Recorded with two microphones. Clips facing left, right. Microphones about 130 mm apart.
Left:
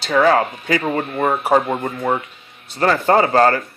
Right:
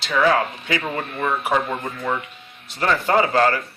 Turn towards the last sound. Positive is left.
turn(degrees=40)  # may be behind; listen again after turning